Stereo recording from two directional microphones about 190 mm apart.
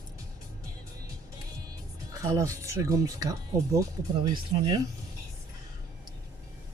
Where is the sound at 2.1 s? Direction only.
15° right (ahead or behind).